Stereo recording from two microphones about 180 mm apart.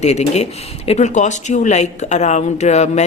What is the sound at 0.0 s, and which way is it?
Speech, 35° left (ahead or behind).